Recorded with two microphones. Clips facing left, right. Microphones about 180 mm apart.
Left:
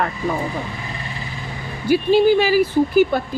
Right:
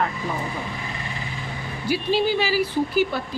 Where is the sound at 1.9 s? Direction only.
50° left (ahead or behind).